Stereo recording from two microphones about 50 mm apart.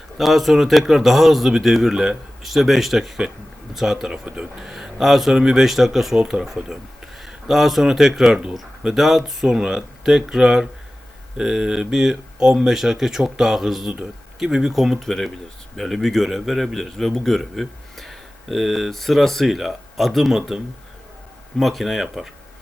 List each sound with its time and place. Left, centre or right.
0.2 s a man's voice: centre
5.6 s a man's voice: centre
14.7 s a man's voice: centre
21.6 s a man's voice: centre